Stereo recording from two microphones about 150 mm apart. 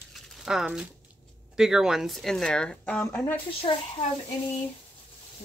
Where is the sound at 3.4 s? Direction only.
35° left (ahead or behind).